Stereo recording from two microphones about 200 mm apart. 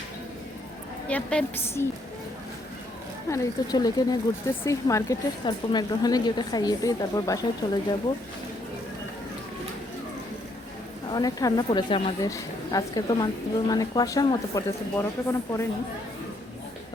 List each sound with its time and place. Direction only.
1.0 s a woman's voice: 5° left (ahead or behind)
3.2 s speech: 15° left (ahead or behind)
11.1 s speech: 20° left (ahead or behind)